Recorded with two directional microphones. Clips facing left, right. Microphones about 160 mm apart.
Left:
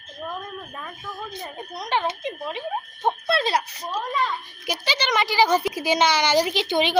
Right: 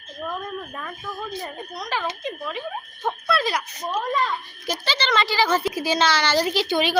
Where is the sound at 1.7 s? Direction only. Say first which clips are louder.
Left 4 dB; 25° left (ahead or behind).